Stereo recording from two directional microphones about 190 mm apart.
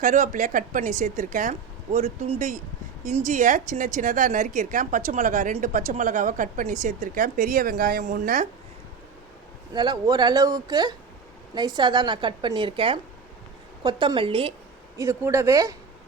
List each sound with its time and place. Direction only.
0.0 s a woman's voice: 40° right (ahead or behind)
9.7 s a woman's voice: 20° right (ahead or behind)
14.9 s speech: 15° right (ahead or behind)